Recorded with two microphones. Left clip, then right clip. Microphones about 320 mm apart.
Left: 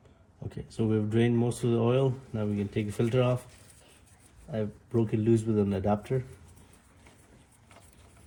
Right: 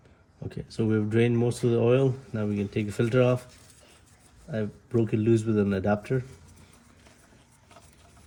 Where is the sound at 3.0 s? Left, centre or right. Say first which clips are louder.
Right 4 dB; right.